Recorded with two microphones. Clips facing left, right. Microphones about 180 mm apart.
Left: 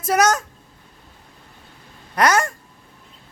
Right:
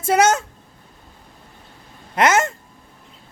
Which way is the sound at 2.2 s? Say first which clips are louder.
Right 1 dB; 25° right (ahead or behind).